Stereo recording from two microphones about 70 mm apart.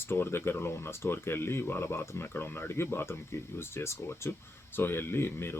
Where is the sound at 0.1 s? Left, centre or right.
Left.